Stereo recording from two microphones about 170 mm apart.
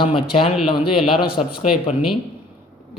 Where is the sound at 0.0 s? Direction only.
30° left (ahead or behind).